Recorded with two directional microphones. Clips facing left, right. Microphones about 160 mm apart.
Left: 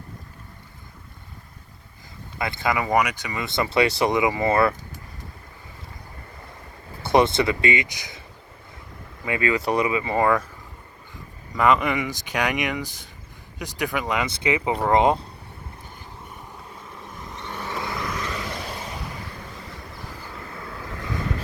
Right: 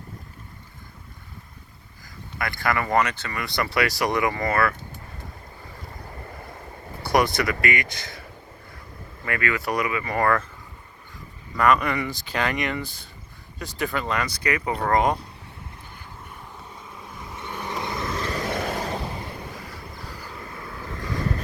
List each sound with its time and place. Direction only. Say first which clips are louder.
2.4 s speech: left 1 dB; 20° left (ahead or behind)
7.0 s speech: left 3 dB; 25° left (ahead or behind)
9.2 s speech: left 3 dB; 25° left (ahead or behind)
11.5 s speech: left 1 dB; 20° left (ahead or behind)
14.7 s speech: left 2 dB; 5° left (ahead or behind)
14.9 s speech: left 3 dB; 25° left (ahead or behind)
17.3 s vehicle: even; 15° right (ahead or behind); by 18.9 s 55° right (ahead or behind)